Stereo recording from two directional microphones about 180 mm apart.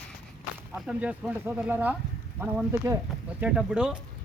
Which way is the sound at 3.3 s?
5° right (ahead or behind).